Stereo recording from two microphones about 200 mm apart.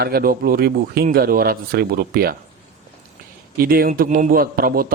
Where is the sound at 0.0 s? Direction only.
50° right (ahead or behind).